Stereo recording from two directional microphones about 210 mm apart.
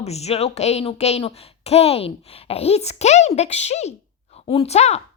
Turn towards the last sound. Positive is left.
turn(degrees=30)  # may be behind; listen again after turning